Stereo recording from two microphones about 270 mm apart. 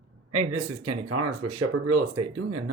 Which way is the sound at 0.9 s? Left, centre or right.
Right.